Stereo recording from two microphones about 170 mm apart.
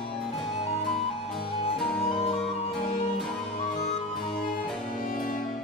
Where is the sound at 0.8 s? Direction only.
Centre (ahead or behind).